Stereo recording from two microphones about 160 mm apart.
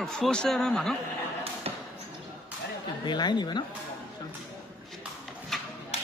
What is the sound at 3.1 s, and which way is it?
Speech, 25° left (ahead or behind).